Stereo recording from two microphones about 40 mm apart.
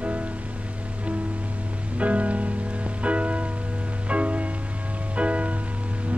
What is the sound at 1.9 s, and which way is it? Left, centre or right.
Music, right.